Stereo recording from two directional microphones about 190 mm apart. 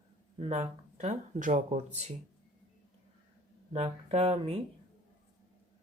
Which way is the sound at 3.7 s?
35° right (ahead or behind).